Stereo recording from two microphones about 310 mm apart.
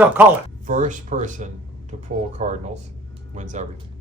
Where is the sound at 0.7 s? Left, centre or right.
Right.